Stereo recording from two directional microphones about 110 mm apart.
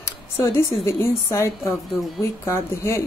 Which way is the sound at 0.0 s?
25° left (ahead or behind).